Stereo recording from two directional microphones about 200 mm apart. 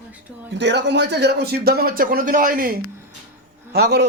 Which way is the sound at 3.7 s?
55° right (ahead or behind).